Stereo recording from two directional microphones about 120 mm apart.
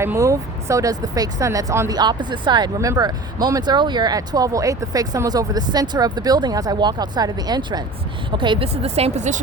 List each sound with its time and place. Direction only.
0.0 s speech: 25° right (ahead or behind)
2.0 s speech: 40° right (ahead or behind)
2.7 s speech: 25° right (ahead or behind)
8.4 s speech: 45° right (ahead or behind); by 9.4 s 85° right